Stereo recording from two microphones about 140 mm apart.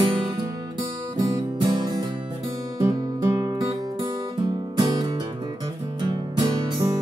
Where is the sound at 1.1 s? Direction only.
30° right (ahead or behind).